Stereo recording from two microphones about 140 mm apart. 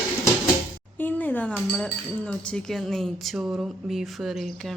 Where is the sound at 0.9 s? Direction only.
10° left (ahead or behind).